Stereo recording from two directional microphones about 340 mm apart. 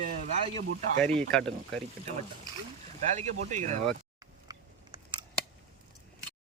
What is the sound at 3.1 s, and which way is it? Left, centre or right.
Speech, right.